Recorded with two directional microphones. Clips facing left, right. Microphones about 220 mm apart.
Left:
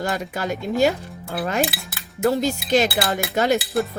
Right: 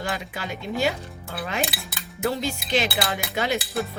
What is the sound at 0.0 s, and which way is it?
Speech, 45° left (ahead or behind).